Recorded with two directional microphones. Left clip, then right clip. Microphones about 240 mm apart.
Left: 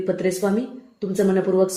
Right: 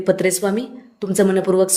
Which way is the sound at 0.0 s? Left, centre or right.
Right.